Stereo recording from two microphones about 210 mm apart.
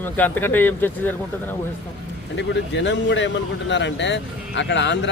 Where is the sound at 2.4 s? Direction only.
60° left (ahead or behind).